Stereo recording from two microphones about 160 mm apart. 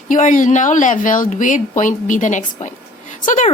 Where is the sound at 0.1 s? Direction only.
55° left (ahead or behind).